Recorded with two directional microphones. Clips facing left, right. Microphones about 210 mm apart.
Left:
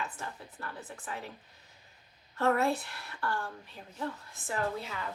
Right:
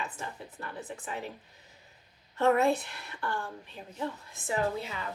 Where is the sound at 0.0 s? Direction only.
15° right (ahead or behind).